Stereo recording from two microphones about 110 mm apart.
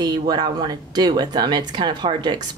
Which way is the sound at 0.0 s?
40° right (ahead or behind).